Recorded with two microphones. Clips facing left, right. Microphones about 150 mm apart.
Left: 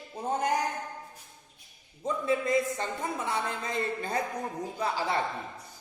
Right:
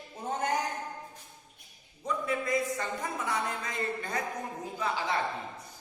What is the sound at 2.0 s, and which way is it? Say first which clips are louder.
A man's voice: left 4 dB; 25° left (ahead or behind).